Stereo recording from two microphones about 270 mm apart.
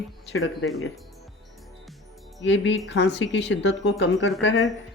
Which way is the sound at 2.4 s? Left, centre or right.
Left.